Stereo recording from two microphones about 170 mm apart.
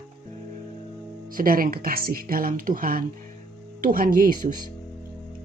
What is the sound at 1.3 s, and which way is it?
Speech, 55° right (ahead or behind).